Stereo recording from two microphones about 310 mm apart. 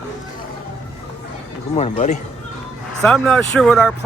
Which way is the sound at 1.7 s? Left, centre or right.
Left.